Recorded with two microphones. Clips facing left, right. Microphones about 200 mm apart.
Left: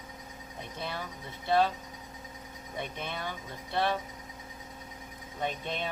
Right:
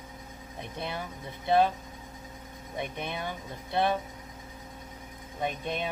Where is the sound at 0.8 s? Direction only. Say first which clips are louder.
Right 2 dB; 20° right (ahead or behind).